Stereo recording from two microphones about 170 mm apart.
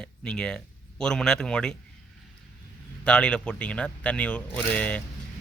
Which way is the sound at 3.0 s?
5° left (ahead or behind).